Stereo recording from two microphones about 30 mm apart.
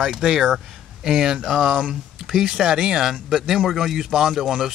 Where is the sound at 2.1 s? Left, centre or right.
Centre.